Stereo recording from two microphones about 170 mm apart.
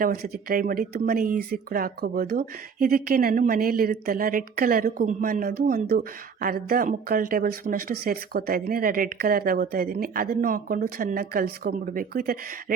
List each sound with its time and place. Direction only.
0.0 s speech: 60° right (ahead or behind)